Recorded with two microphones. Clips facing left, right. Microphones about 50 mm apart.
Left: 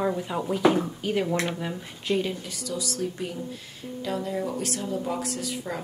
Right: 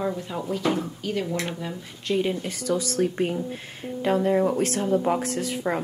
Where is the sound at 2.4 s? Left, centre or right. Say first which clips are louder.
Right 6 dB; right.